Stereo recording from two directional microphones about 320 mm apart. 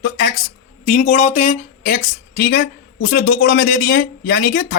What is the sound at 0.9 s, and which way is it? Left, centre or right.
A woman's voice, left.